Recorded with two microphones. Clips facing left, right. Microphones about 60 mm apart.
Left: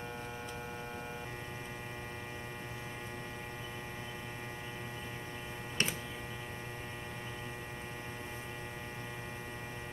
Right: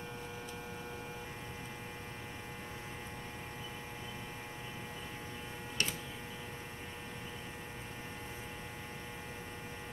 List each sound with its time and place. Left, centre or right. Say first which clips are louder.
5.8 s mains hum: left 2 dB; left